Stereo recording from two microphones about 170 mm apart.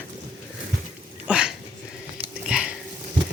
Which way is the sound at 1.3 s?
5° right (ahead or behind).